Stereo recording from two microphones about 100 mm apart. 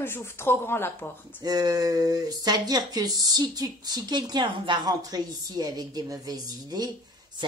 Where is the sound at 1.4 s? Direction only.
40° right (ahead or behind).